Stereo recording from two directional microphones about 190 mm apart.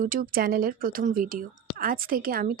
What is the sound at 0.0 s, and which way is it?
Speech, 50° right (ahead or behind).